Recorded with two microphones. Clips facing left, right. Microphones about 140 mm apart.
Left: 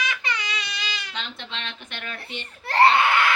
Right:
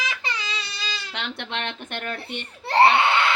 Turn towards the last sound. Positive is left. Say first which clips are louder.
# even
turn(degrees=-25)  # may be behind; listen again after turning